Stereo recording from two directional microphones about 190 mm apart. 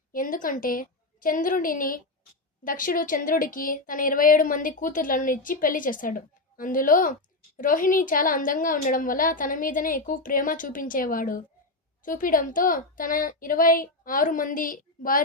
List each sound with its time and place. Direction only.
0.1 s a woman's voice: 45° left (ahead or behind)